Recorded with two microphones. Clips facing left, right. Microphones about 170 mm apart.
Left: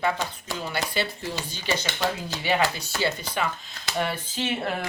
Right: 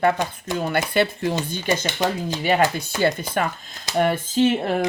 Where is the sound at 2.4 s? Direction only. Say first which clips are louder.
Right 5 dB; 50° right (ahead or behind).